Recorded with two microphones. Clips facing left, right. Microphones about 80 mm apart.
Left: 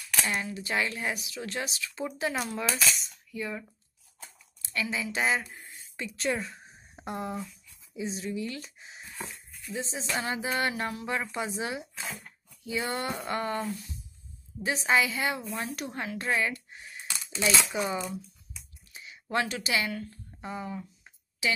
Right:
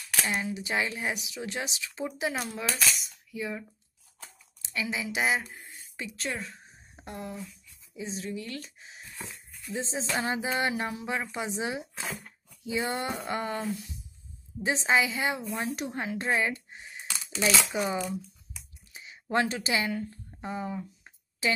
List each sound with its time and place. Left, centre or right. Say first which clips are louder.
0.3 s speech: right 2 dB; centre
2.3 s cutlery: left 2 dB; centre
4.6 s a woman's voice: left 1 dB; centre
5.2 s speech: even; centre
7.1 s speech: left 4 dB; left
7.9 s cutlery: left 2 dB; centre
9.7 s speech: right 2 dB; right
12.2 s a sound: right 1 dB; right
13.3 s speech: left 2 dB; centre
19.3 s speech: right 2 dB; right
21.4 s a woman's voice: right 1 dB; right